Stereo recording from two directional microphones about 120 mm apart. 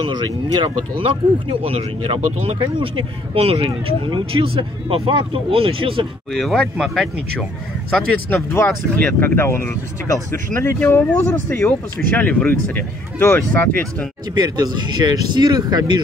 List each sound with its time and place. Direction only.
0.1 s speech: 40° right (ahead or behind)
6.3 s speech: centre (ahead or behind)
7.9 s speech: 10° left (ahead or behind)
14.3 s speech: 35° right (ahead or behind)